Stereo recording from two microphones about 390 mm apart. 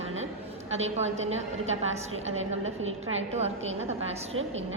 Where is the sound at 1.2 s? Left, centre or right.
Right.